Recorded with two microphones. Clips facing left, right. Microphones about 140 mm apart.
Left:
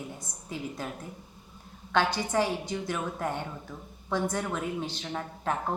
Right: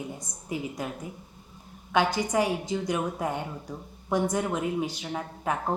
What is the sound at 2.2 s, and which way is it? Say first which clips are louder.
A woman's voice: right 2 dB; 15° right (ahead or behind).